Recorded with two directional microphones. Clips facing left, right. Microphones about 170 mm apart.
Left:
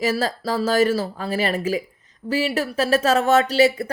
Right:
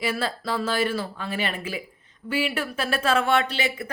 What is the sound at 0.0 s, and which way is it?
A woman's voice, 40° left (ahead or behind).